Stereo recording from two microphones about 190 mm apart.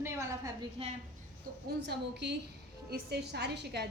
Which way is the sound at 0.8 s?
30° right (ahead or behind).